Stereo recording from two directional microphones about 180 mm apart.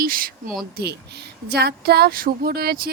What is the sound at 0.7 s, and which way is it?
Speech, 65° right (ahead or behind).